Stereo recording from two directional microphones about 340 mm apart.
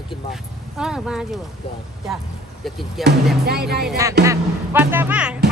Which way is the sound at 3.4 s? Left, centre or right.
Right.